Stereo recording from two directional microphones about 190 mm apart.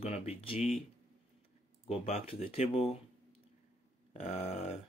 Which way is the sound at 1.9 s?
30° left (ahead or behind).